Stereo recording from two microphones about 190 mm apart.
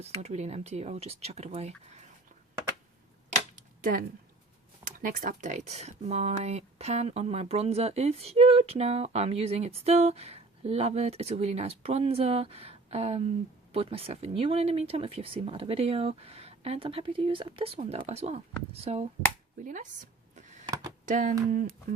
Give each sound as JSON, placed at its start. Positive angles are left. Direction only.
{"t": 0.0, "sound": "speech", "side_deg": -35}
{"t": 3.8, "sound": "speech", "side_deg": -45}
{"t": 21.1, "sound": "speech", "side_deg": -45}